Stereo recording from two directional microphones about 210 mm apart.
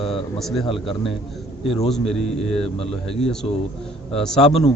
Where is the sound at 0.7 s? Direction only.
25° left (ahead or behind).